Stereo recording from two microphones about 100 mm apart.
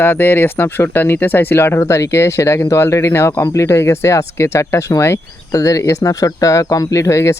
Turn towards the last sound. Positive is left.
turn(degrees=30)  # may be behind; listen again after turning